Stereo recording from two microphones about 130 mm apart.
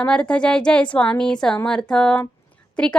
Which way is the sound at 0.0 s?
10° left (ahead or behind).